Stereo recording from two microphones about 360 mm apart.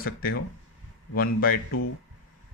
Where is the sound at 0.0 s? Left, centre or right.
Left.